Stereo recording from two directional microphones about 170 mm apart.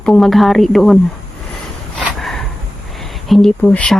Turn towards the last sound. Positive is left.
turn(degrees=5)  # may be behind; listen again after turning